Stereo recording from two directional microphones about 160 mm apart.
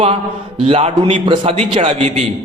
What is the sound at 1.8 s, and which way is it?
Speech, 40° right (ahead or behind).